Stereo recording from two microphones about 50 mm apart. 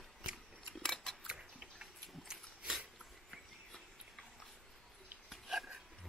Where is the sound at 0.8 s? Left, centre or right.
Centre.